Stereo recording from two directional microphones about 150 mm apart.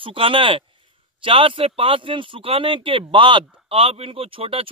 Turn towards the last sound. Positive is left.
turn(degrees=-40)  # may be behind; listen again after turning